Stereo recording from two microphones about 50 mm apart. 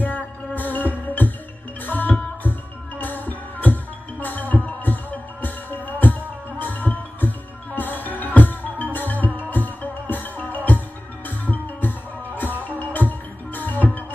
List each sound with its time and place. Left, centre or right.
0.6 s music: left